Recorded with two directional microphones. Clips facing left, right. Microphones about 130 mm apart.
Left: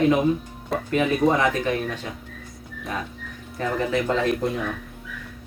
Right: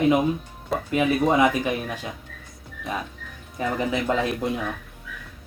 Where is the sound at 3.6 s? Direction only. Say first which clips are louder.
Even; 15° right (ahead or behind).